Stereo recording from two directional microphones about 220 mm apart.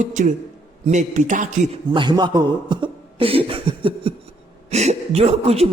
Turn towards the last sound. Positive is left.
turn(degrees=-25)  # may be behind; listen again after turning